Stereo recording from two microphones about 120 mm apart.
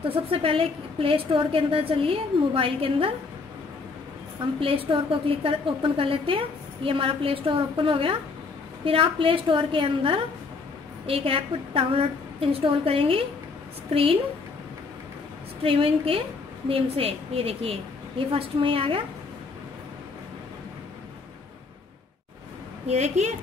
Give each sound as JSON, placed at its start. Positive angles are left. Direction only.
{"t": 0.1, "sound": "a woman's voice", "side_deg": -50}
{"t": 4.6, "sound": "a woman's voice", "side_deg": -50}
{"t": 15.6, "sound": "a woman's voice", "side_deg": -50}
{"t": 22.8, "sound": "a woman's voice", "side_deg": -65}